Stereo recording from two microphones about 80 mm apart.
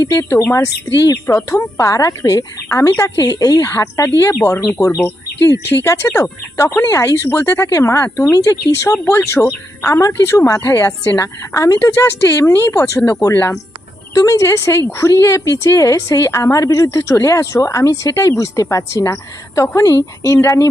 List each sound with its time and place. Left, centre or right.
0.0 s a woman's voice: left
0.9 s a woman's voice: left
1.5 s a woman's voice: left
5.6 s a woman's voice: left
9.0 s a woman's voice: left
10.8 s speech: left
11.2 s a woman's voice: left
11.9 s a woman's voice: left
14.1 s a woman's voice: left